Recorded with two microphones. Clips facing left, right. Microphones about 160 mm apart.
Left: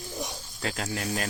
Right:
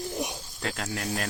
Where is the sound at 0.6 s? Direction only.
Centre (ahead or behind).